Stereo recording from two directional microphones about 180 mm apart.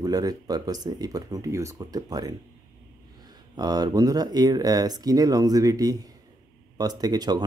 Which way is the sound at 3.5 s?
20° right (ahead or behind).